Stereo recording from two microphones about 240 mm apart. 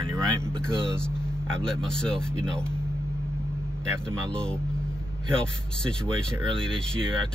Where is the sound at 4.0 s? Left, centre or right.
Centre.